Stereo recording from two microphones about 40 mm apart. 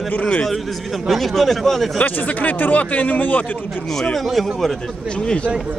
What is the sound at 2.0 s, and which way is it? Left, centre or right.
Speech, left.